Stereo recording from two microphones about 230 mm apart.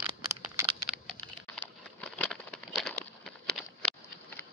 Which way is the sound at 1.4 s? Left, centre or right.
Centre.